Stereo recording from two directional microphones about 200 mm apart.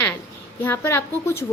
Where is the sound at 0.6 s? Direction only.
10° left (ahead or behind).